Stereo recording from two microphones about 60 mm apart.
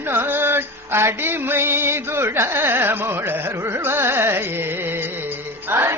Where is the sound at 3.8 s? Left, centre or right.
Right.